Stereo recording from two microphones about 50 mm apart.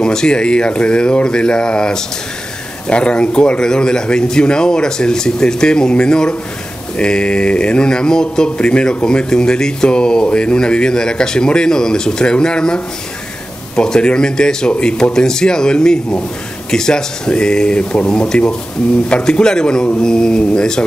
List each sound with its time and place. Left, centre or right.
0.0 s speech: centre